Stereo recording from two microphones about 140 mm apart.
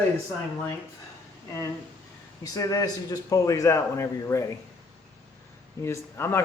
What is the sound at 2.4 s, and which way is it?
A man's voice, 25° left (ahead or behind).